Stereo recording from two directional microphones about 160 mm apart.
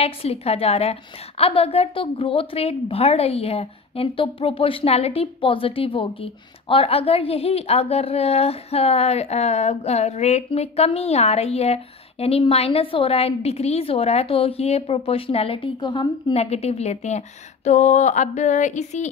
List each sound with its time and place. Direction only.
0.0 s a woman's voice: 40° left (ahead or behind)